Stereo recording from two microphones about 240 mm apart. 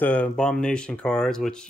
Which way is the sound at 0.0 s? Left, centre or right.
Centre.